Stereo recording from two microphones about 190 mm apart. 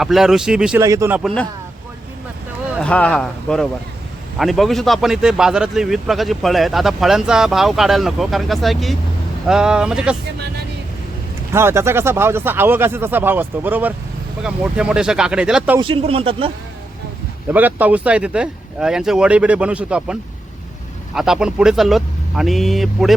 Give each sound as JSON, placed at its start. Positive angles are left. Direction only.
{"t": 0.0, "sound": "a man's voice", "side_deg": 0}
{"t": 0.8, "sound": "speech", "side_deg": -15}
{"t": 2.8, "sound": "a man's voice", "side_deg": 5}
{"t": 11.5, "sound": "a man's voice", "side_deg": -15}
{"t": 15.8, "sound": "speech", "side_deg": -30}
{"t": 17.5, "sound": "a man's voice", "side_deg": -10}
{"t": 21.2, "sound": "a man's voice", "side_deg": -5}